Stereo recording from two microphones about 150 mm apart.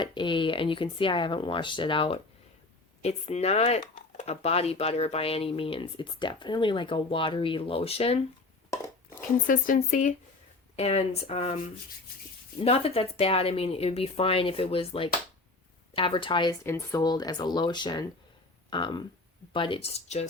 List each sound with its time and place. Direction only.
0.0 s speech: 30° left (ahead or behind)
9.5 s speech: 65° left (ahead or behind)
10.8 s speech: 45° left (ahead or behind)
12.5 s speech: 40° left (ahead or behind)
16.6 s speech: 20° left (ahead or behind); by 20.2 s 45° left (ahead or behind)